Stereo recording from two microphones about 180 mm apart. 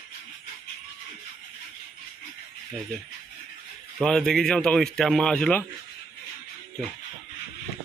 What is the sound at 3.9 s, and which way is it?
Speech, 5° left (ahead or behind).